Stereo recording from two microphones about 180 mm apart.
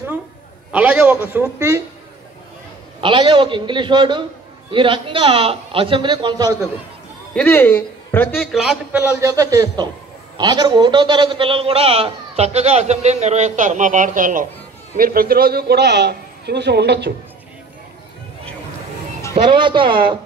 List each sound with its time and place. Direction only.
0.7 s a man's voice: 5° right (ahead or behind)
3.0 s a man's voice: 30° right (ahead or behind)
7.3 s speech: 10° left (ahead or behind)
8.4 s a man's voice: centre (ahead or behind); by 17.1 s 70° right (ahead or behind)
19.3 s a man's voice: 25° right (ahead or behind)